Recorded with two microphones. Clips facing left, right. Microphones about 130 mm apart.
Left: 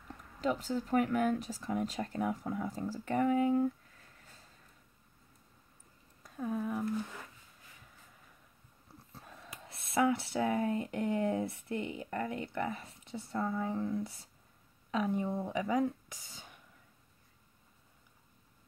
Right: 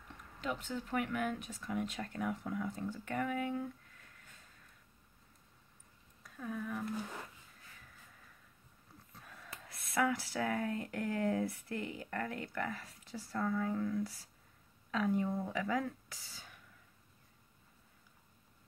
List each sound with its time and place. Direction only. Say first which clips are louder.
0.4 s speech: left 6 dB; 35° left (ahead or behind)
6.2 s a sound: left 6 dB; 35° left (ahead or behind)
9.1 s speech: left 2 dB; 25° left (ahead or behind)